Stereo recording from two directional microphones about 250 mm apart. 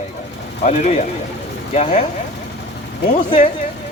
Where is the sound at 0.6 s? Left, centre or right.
Left.